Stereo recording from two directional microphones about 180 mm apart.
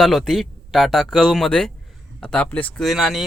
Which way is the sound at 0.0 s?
Centre (ahead or behind).